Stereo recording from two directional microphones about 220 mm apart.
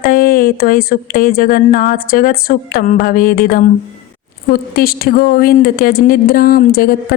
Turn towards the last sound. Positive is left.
turn(degrees=40)  # may be behind; listen again after turning